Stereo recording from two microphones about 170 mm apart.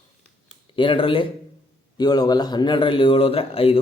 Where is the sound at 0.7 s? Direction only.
30° left (ahead or behind).